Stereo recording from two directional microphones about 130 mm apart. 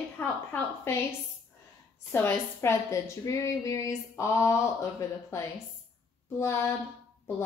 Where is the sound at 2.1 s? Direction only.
20° left (ahead or behind).